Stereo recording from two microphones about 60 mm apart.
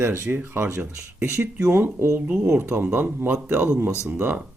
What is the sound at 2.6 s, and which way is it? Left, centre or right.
Speech, right.